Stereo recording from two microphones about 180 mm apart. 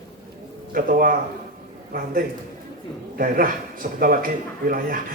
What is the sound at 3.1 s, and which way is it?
A man's voice, 50° right (ahead or behind).